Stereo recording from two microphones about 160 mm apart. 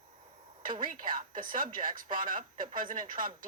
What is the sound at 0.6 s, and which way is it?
A woman's voice, 55° right (ahead or behind).